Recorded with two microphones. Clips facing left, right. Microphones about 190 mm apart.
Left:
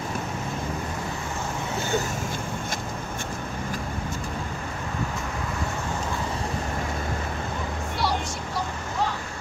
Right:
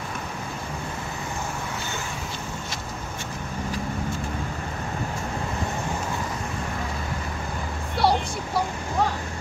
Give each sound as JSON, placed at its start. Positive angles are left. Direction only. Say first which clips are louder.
{"t": 8.0, "sound": "vehicle", "louder": "right 6 dB", "side_deg": -60}